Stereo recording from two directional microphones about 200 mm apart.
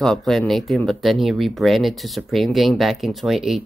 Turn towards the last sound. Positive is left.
turn(degrees=0)  # may be behind; listen again after turning